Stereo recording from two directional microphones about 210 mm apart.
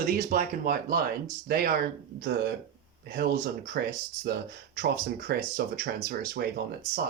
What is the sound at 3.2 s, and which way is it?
Speech, 45° right (ahead or behind).